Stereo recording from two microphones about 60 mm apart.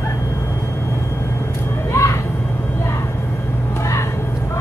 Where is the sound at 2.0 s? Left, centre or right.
Left.